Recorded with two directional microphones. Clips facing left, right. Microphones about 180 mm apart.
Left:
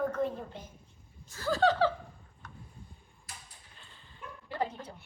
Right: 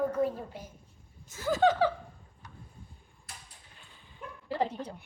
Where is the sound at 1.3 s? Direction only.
20° right (ahead or behind).